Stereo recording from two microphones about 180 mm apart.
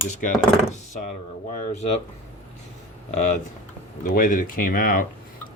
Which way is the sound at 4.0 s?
50° left (ahead or behind).